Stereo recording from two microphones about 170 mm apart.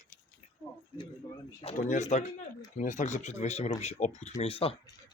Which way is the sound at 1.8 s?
45° left (ahead or behind).